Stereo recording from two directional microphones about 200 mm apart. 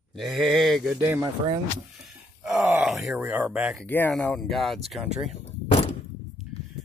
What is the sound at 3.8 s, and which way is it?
Speech, 10° left (ahead or behind).